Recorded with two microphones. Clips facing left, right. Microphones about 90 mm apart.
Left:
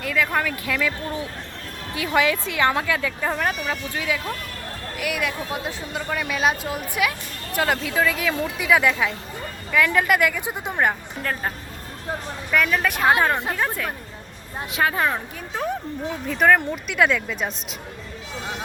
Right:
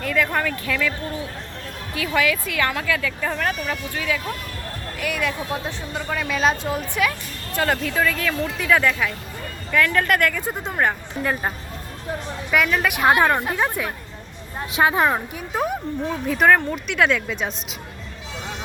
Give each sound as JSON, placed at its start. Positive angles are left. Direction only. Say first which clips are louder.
{"t": 0.0, "sound": "a woman's voice", "louder": "right 1 dB", "side_deg": 5}
{"t": 2.0, "sound": "speech", "louder": "left 1 dB", "side_deg": 25}
{"t": 11.2, "sound": "a woman's voice", "louder": "right 3 dB", "side_deg": -10}
{"t": 13.1, "sound": "a woman's voice", "louder": "right 2 dB", "side_deg": -20}
{"t": 16.2, "sound": "a woman's voice", "louder": "right 1 dB", "side_deg": 0}